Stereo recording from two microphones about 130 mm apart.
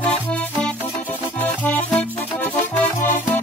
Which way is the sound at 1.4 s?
10° left (ahead or behind).